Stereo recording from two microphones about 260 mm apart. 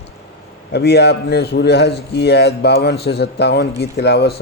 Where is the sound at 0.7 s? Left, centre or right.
Left.